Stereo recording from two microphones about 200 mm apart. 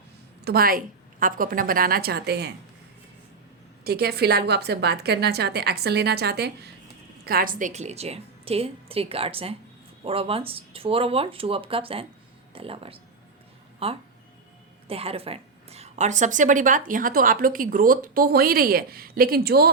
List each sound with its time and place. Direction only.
0.4 s a woman's voice: 50° right (ahead or behind)
3.8 s a woman's voice: 50° right (ahead or behind)